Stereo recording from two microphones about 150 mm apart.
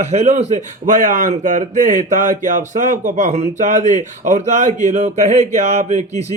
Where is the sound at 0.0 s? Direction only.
45° right (ahead or behind).